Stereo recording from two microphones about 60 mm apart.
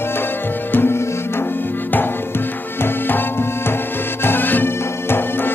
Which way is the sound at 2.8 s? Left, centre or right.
Left.